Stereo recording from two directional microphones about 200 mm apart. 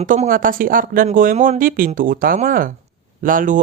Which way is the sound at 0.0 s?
40° right (ahead or behind).